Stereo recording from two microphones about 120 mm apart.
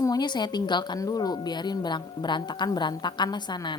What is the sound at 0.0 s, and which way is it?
A woman's voice, 35° left (ahead or behind).